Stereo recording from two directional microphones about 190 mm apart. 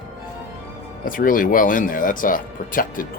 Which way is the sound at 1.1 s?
45° left (ahead or behind).